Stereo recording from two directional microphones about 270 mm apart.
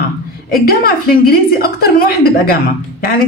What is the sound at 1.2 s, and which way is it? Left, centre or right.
A woman's voice, left.